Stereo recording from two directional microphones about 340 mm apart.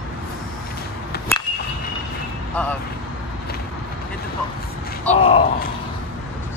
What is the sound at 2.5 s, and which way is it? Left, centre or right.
Vehicle, centre.